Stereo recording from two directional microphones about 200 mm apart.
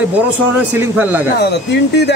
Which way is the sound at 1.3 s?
55° left (ahead or behind).